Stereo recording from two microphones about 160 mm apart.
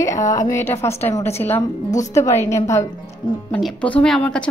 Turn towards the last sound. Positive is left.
turn(degrees=5)  # may be behind; listen again after turning